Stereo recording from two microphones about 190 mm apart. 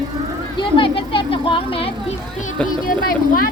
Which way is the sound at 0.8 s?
25° left (ahead or behind).